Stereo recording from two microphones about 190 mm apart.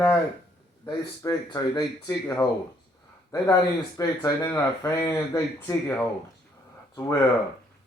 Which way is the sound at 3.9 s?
20° left (ahead or behind).